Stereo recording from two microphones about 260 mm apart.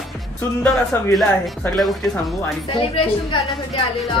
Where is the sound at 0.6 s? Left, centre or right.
Centre.